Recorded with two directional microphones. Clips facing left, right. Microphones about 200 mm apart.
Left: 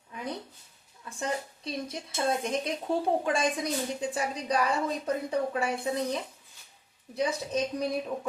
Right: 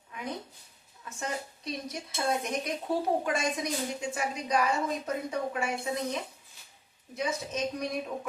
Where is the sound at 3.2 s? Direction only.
30° left (ahead or behind).